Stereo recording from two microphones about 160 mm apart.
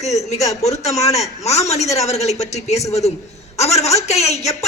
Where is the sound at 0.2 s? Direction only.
45° left (ahead or behind).